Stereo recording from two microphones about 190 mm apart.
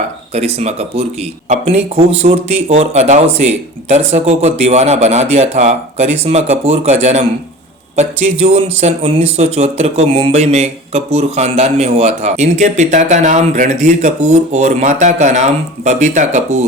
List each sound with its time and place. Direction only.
0.3 s speech: 35° right (ahead or behind)